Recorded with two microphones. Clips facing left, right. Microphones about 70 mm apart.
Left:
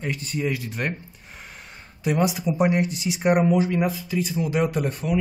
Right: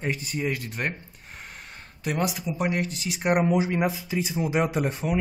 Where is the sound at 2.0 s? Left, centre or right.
Centre.